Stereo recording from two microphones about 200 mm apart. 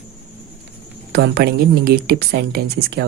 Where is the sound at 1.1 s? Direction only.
55° right (ahead or behind).